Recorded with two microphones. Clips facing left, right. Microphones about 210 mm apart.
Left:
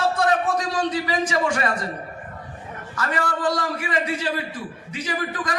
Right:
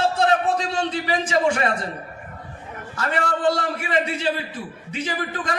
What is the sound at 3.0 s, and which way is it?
A man's voice, 25° right (ahead or behind).